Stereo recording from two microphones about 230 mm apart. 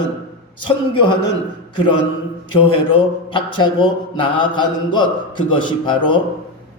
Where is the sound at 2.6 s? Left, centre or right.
Left.